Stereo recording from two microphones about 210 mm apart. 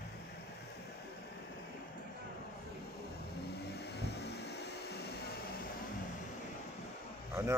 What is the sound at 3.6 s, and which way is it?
Vehicle, 50° left (ahead or behind).